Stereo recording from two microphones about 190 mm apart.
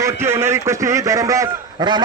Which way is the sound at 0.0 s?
15° right (ahead or behind).